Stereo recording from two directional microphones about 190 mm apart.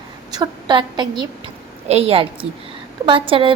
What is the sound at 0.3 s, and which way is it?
A woman's voice, 20° right (ahead or behind).